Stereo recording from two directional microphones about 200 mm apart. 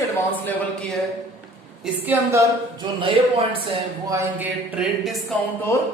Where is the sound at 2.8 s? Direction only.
25° right (ahead or behind).